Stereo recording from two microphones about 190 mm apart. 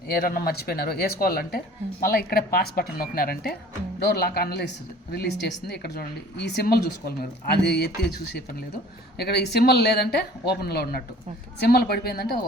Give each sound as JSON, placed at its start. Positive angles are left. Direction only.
{"t": 0.1, "sound": "speech", "side_deg": 50}
{"t": 9.1, "sound": "speech", "side_deg": 60}